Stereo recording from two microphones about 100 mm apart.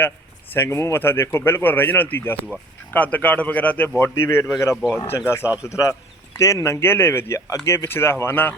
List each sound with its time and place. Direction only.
0.5 s speech: 25° left (ahead or behind)
4.7 s speech: 5° right (ahead or behind)
4.9 s speech: 25° left (ahead or behind)